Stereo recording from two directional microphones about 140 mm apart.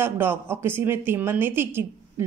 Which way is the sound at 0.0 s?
15° right (ahead or behind).